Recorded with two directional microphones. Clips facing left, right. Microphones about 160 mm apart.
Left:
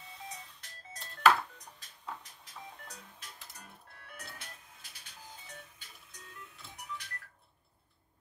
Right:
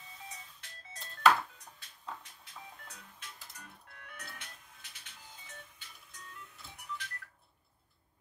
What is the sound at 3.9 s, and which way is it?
Music, 35° left (ahead or behind).